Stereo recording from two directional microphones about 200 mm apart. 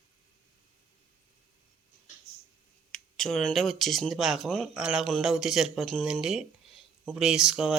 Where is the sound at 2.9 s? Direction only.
Centre (ahead or behind).